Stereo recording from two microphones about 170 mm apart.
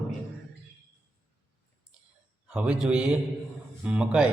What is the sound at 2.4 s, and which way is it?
A man's voice, 5° right (ahead or behind).